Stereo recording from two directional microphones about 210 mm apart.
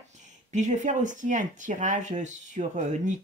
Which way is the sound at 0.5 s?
35° right (ahead or behind).